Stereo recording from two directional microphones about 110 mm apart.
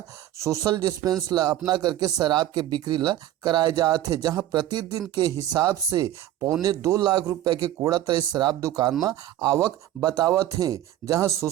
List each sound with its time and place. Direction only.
0.4 s speech: 30° right (ahead or behind)